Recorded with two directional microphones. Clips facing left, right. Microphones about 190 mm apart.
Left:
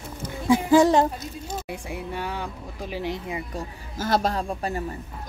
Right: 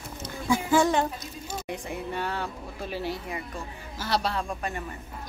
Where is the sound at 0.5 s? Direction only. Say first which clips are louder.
Left 6 dB; 35° left (ahead or behind).